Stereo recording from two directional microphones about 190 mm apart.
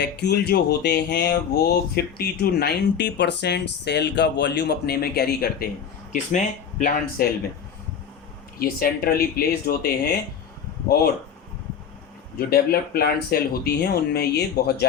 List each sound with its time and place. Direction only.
0.0 s music: 60° left (ahead or behind)
6.3 s speech: 40° left (ahead or behind)
8.5 s speech: 50° left (ahead or behind)
12.4 s speech: 50° left (ahead or behind)